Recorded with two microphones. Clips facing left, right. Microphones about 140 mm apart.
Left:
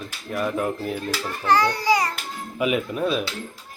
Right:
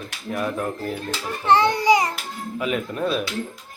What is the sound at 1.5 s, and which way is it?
Babbling, 25° right (ahead or behind).